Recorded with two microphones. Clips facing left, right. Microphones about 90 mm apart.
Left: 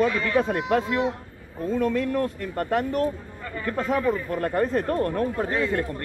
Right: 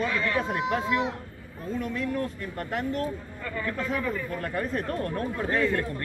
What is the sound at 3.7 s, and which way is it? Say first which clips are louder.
Speech: left 7 dB; 30° left (ahead or behind).